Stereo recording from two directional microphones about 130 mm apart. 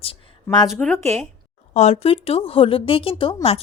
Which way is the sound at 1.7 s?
55° left (ahead or behind).